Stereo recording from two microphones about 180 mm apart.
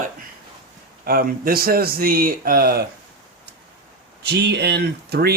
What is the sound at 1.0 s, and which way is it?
Speech, 55° right (ahead or behind).